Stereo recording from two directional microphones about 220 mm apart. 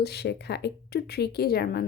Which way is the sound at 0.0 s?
50° left (ahead or behind).